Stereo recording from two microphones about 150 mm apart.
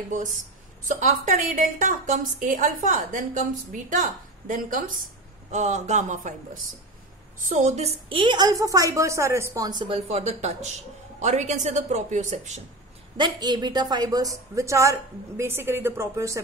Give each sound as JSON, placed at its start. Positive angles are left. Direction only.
{"t": 0.8, "sound": "a woman's voice", "side_deg": -55}
{"t": 5.5, "sound": "a woman's voice", "side_deg": -50}
{"t": 9.7, "sound": "a woman's voice", "side_deg": -35}
{"t": 13.2, "sound": "speech", "side_deg": -30}